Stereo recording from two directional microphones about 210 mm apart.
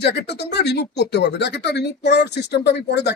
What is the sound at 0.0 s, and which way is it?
Speech, 50° left (ahead or behind).